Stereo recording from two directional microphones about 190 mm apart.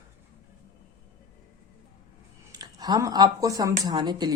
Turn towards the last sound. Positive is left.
turn(degrees=-20)  # may be behind; listen again after turning